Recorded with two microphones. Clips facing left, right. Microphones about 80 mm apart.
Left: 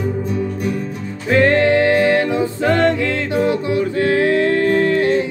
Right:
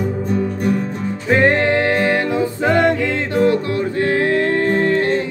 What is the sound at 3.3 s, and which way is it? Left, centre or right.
Music, centre.